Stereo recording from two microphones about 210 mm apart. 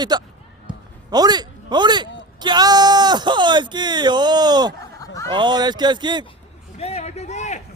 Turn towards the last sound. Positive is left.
turn(degrees=35)  # may be behind; listen again after turning